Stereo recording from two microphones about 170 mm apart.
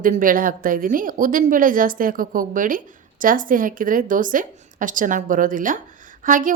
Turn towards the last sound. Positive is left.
turn(degrees=-50)  # may be behind; listen again after turning